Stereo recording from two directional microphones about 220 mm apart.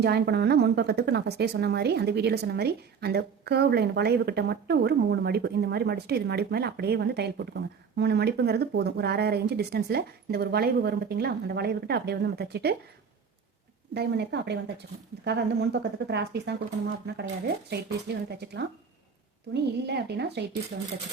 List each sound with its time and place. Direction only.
0.0 s a woman's voice: 45° right (ahead or behind)
13.9 s a woman's voice: 50° right (ahead or behind)